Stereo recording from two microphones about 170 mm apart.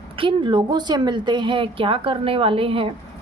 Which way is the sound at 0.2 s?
30° right (ahead or behind).